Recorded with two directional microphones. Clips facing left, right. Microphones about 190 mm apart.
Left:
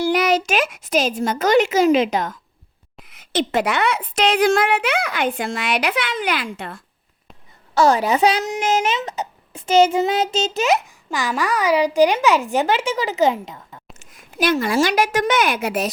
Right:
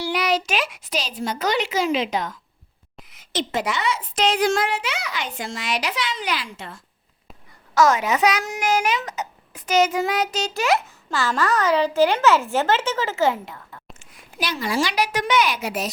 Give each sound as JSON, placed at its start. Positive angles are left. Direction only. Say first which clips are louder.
{"t": 0.0, "sound": "a child's voice", "louder": "left 5 dB", "side_deg": 45}
{"t": 3.1, "sound": "a woman's voice", "louder": "left 5 dB", "side_deg": 60}
{"t": 7.8, "sound": "a child's voice", "louder": "left 2 dB", "side_deg": 35}
{"t": 14.0, "sound": "a woman's voice", "louder": "left 9 dB", "side_deg": 45}